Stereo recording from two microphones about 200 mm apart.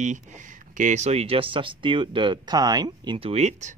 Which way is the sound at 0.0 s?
35° right (ahead or behind).